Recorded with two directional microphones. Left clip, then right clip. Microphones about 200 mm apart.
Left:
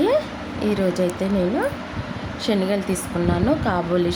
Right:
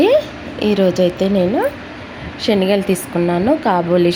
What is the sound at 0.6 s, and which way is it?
Speech, 15° right (ahead or behind).